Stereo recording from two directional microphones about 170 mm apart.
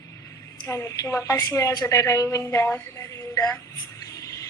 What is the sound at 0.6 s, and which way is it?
A woman's voice, 20° left (ahead or behind).